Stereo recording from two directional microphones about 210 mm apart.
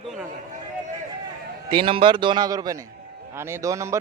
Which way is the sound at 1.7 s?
25° right (ahead or behind).